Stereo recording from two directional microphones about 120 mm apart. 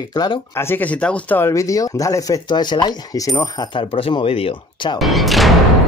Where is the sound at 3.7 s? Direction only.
50° left (ahead or behind).